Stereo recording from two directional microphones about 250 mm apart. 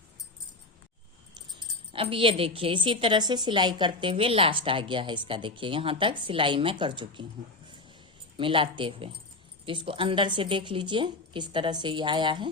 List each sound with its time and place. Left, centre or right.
1.9 s a woman's voice: right
8.4 s a woman's voice: right